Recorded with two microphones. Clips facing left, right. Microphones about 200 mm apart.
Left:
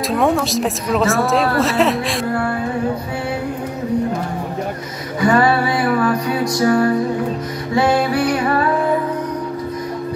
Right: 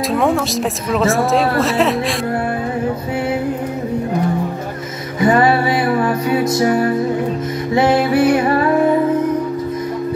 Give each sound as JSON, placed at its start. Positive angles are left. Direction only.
{"t": 0.1, "sound": "speech", "side_deg": 0}
{"t": 5.2, "sound": "music", "side_deg": -20}